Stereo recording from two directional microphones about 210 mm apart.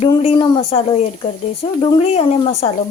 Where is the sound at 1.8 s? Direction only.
30° left (ahead or behind).